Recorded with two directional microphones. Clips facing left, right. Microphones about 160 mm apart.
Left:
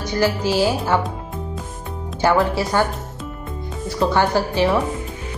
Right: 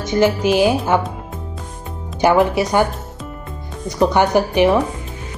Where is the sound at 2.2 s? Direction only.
15° right (ahead or behind).